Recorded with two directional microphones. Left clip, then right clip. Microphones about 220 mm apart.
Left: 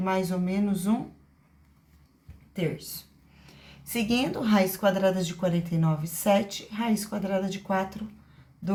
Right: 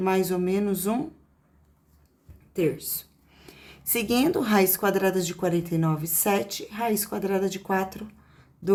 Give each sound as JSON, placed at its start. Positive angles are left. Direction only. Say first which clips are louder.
{"t": 0.0, "sound": "a woman's voice", "louder": "right 4 dB", "side_deg": -50}
{"t": 2.5, "sound": "a woman's voice", "louder": "right 6 dB", "side_deg": -55}